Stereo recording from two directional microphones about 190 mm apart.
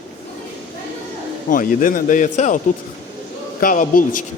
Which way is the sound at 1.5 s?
45° left (ahead or behind).